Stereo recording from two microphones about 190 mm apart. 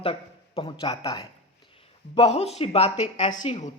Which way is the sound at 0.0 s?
30° left (ahead or behind).